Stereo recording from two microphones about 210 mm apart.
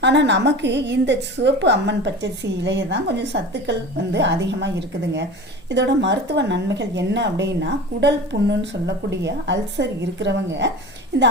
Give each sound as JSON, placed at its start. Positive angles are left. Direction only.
{"t": 0.0, "sound": "a woman's voice", "side_deg": -55}